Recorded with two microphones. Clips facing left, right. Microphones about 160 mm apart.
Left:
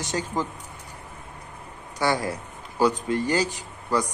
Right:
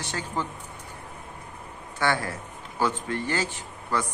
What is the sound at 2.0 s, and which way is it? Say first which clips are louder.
Speech: left 2 dB; 15° left (ahead or behind).